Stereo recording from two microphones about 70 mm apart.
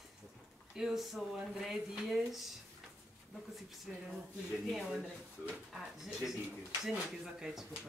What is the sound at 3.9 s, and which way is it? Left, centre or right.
Speech, centre.